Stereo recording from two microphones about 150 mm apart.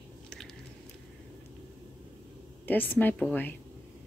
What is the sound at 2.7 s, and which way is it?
Speech, 15° left (ahead or behind).